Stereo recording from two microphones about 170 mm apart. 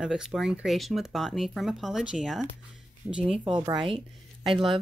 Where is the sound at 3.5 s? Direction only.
25° right (ahead or behind).